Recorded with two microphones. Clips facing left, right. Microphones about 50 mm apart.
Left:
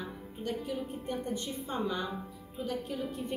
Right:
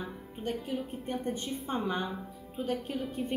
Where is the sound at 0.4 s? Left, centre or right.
Right.